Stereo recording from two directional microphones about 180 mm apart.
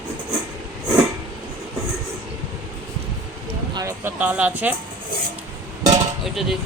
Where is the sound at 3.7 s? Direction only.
15° right (ahead or behind).